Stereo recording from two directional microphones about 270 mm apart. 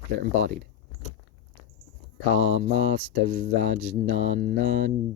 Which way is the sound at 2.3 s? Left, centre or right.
Right.